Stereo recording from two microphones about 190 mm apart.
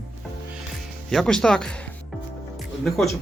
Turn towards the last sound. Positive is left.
turn(degrees=0)  # may be behind; listen again after turning